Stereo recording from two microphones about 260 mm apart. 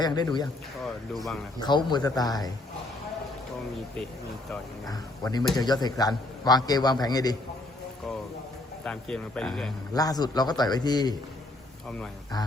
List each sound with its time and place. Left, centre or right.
0.0 s a man's voice: centre
0.9 s speech: centre
1.5 s a man's voice: centre
4.9 s a man's voice: centre
8.8 s speech: centre
9.9 s a man's voice: centre